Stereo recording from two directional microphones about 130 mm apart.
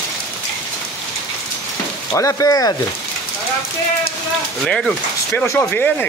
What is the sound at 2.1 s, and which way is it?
Speech, 25° left (ahead or behind).